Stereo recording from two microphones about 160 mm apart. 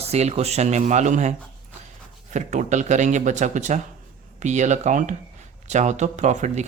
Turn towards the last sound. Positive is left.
turn(degrees=-45)  # may be behind; listen again after turning